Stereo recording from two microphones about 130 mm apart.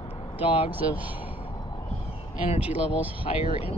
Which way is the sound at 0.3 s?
45° left (ahead or behind).